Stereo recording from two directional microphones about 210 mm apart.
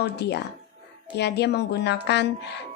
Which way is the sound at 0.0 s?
55° left (ahead or behind).